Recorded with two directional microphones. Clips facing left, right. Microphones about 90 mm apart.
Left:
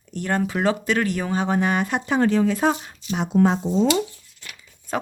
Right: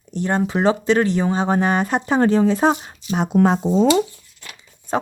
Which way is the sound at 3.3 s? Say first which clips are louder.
Right 2 dB; 65° right (ahead or behind).